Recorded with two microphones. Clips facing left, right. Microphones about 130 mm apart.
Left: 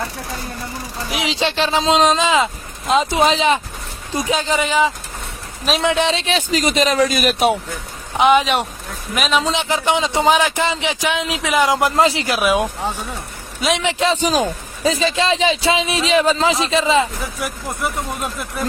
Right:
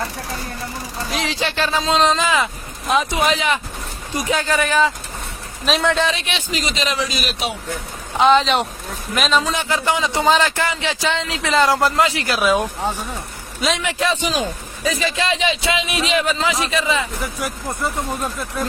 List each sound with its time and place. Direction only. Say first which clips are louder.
1.1 s speech: left 3 dB; 15° left (ahead or behind)
6.1 s speech: left 5 dB; 30° left (ahead or behind); by 7.5 s 50° left (ahead or behind)
8.2 s a man's voice: even; 15° left (ahead or behind)
9.4 s speech: left 2 dB; 20° left (ahead or behind)
11.9 s speech: left 3 dB; 25° left (ahead or behind)
12.3 s speech: left 1 dB; 10° left (ahead or behind)
13.7 s speech: left 3 dB; 20° left (ahead or behind)
14.2 s a man's voice: left 4 dB; 40° left (ahead or behind)
14.8 s a man's voice: left 4 dB; 30° left (ahead or behind)